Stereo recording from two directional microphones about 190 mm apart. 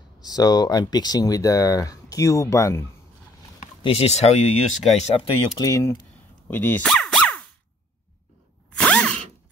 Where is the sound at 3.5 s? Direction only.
35° left (ahead or behind).